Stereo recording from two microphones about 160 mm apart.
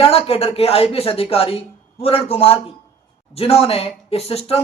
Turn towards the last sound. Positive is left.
turn(degrees=40)  # may be behind; listen again after turning